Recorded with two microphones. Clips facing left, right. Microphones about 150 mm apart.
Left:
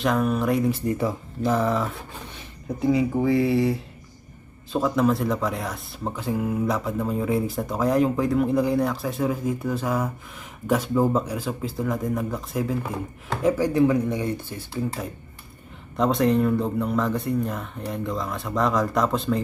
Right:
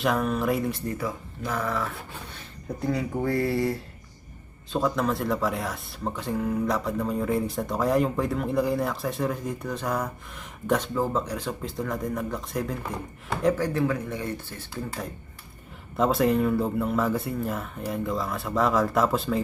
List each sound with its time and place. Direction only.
0.0 s speech: centre (ahead or behind)
0.9 s speech: 25° left (ahead or behind)
2.6 s speech: 5° left (ahead or behind)
16.0 s speech: 5° right (ahead or behind)